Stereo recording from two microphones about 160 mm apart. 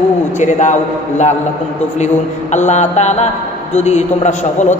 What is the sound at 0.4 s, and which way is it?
Speech, 50° left (ahead or behind).